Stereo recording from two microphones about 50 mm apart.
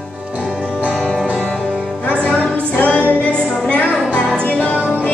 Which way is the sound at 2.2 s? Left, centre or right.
Left.